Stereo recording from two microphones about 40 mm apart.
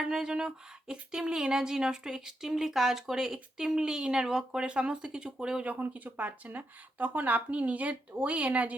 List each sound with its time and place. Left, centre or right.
0.0 s speech: centre
4.6 s speech: right
5.6 s speech: right